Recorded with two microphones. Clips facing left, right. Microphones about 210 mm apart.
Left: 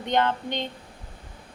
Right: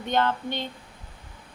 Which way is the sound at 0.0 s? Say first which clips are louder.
Left 1 dB; 20° left (ahead or behind).